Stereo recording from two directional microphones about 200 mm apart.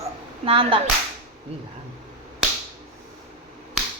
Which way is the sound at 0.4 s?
25° right (ahead or behind).